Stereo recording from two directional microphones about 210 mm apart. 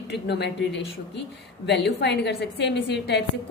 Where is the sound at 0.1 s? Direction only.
55° left (ahead or behind).